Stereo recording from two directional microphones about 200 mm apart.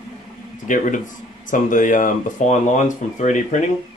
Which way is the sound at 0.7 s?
40° left (ahead or behind).